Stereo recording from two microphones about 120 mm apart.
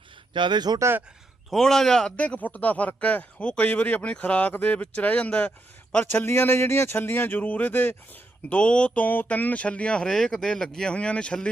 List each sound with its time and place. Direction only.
0.3 s speech: 40° right (ahead or behind)
1.5 s speech: 5° left (ahead or behind)